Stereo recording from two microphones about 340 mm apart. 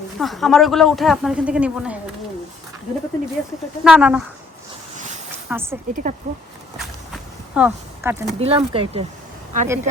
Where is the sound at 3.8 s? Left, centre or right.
Centre.